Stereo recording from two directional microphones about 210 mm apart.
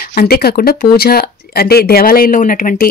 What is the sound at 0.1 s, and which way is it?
Speech, 45° left (ahead or behind).